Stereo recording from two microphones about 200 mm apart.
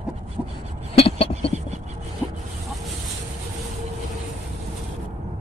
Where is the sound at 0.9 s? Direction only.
30° left (ahead or behind).